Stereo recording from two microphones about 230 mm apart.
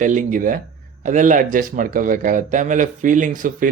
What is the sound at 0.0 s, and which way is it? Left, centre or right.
A man's voice, right.